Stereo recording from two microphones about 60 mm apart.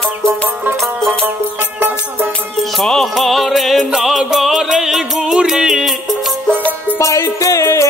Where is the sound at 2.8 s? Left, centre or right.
Centre.